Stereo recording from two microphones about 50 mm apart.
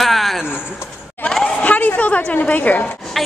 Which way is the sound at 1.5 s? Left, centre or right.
Left.